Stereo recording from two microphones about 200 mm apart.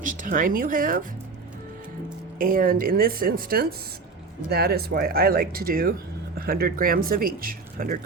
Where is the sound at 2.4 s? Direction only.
45° right (ahead or behind).